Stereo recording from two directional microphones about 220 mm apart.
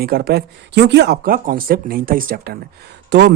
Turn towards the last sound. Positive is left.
turn(degrees=-50)  # may be behind; listen again after turning